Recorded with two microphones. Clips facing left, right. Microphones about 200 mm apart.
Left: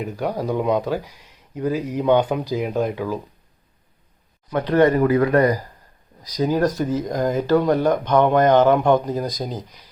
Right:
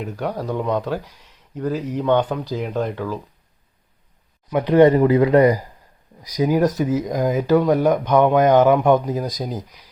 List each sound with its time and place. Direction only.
0.0 s speech: 5° left (ahead or behind)
4.5 s speech: 15° right (ahead or behind)